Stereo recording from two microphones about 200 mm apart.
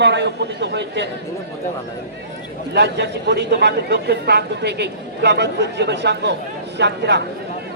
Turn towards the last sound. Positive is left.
turn(degrees=-60)  # may be behind; listen again after turning